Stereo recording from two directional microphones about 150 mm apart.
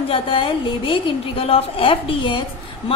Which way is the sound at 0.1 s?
35° left (ahead or behind).